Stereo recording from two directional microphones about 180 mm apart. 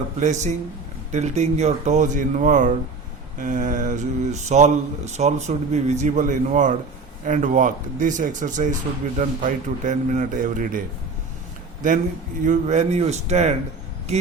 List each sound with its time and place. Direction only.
0.2 s speech: 40° right (ahead or behind)
11.8 s speech: 45° right (ahead or behind)